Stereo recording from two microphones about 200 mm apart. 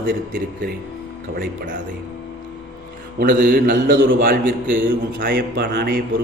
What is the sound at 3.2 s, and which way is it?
A man's voice, 45° right (ahead or behind).